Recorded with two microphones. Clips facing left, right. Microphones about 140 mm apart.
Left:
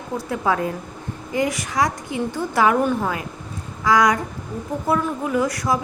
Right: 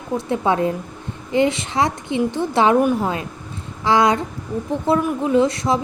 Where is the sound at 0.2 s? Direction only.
25° right (ahead or behind).